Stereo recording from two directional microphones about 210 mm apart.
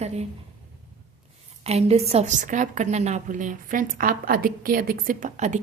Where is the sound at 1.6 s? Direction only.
30° right (ahead or behind).